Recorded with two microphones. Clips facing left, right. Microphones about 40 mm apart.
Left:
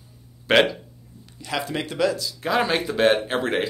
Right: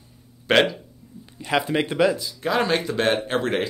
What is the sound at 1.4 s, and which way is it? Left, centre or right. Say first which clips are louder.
Speech: right 5 dB; right.